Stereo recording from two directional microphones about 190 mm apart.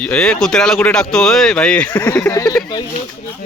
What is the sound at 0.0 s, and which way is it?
Speech, 5° left (ahead or behind).